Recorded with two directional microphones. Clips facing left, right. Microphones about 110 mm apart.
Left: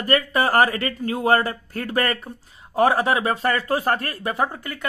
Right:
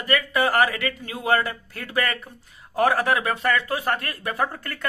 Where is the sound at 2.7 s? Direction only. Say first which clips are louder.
Left 2 dB; 25° left (ahead or behind).